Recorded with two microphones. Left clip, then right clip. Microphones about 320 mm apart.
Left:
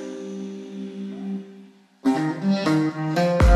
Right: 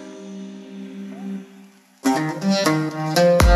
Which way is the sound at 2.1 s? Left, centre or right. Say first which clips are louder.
Right 2 dB; right.